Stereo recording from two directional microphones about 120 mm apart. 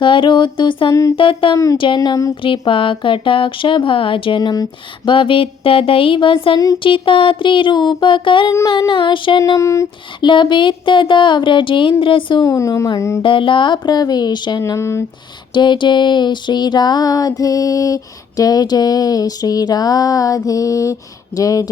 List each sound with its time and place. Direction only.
0.0 s speech: 45° left (ahead or behind)
1.5 s a woman's voice: 30° left (ahead or behind)
2.4 s speech: 45° left (ahead or behind)
5.0 s speech: 45° left (ahead or behind)
9.6 s a woman's voice: 25° left (ahead or behind)
10.2 s speech: 40° left (ahead or behind)
12.4 s a woman's voice: 25° left (ahead or behind)
13.2 s a sound: 45° left (ahead or behind)
14.6 s a woman's voice: 25° left (ahead or behind)
15.5 s a sound: 40° left (ahead or behind)
21.3 s a woman's voice: 30° left (ahead or behind)